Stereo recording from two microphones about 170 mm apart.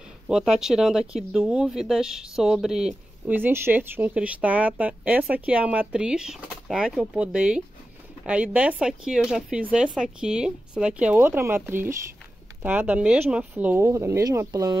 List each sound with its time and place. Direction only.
0.3 s speech: 5° right (ahead or behind); by 14.8 s 20° right (ahead or behind)